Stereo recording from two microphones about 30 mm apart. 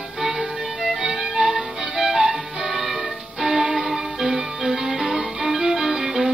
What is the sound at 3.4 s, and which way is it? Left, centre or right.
Music, centre.